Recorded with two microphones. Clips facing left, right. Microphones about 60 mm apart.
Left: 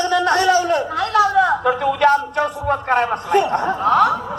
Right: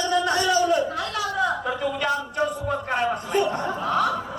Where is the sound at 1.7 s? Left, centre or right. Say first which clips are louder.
Left 9 dB; left.